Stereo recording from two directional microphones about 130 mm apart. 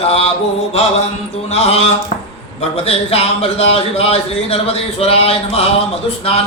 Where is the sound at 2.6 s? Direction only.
50° left (ahead or behind).